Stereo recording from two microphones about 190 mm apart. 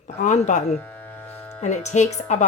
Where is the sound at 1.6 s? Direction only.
40° left (ahead or behind).